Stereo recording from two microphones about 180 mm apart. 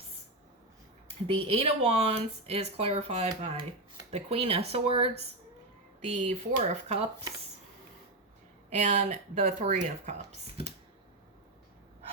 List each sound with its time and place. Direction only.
1.3 s speech: 30° right (ahead or behind)
6.2 s speech: 40° right (ahead or behind)
8.7 s speech: 40° right (ahead or behind)